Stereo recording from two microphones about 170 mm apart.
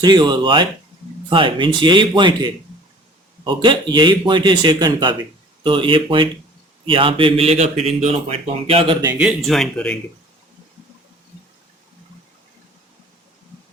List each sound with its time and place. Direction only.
0.0 s speech: 25° right (ahead or behind)
9.1 s speech: centre (ahead or behind)